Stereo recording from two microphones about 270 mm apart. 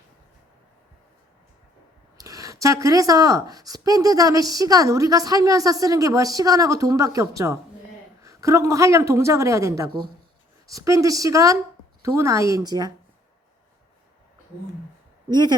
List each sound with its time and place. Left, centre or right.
2.1 s speech: centre
15.3 s speech: centre